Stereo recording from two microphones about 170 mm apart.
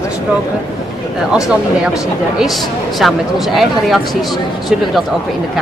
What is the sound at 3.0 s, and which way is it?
Speech, centre (ahead or behind).